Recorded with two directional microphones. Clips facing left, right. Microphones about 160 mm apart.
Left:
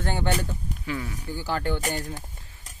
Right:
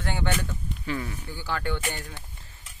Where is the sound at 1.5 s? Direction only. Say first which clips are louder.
Left 3 dB; 35° left (ahead or behind).